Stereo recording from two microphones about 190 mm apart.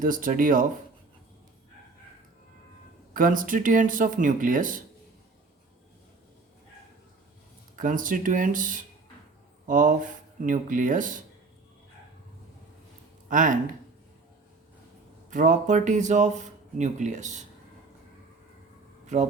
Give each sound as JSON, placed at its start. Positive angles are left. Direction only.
{"t": 0.0, "sound": "speech", "side_deg": -45}
{"t": 3.1, "sound": "speech", "side_deg": -45}
{"t": 7.8, "sound": "speech", "side_deg": -45}
{"t": 13.3, "sound": "speech", "side_deg": -45}
{"t": 15.3, "sound": "speech", "side_deg": -40}
{"t": 19.0, "sound": "speech", "side_deg": -40}